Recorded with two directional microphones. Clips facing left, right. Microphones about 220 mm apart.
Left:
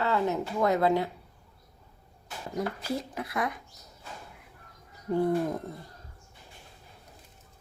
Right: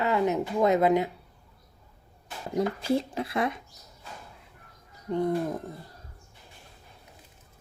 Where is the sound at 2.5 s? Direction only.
25° right (ahead or behind).